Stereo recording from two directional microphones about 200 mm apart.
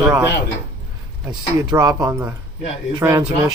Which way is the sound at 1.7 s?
20° right (ahead or behind).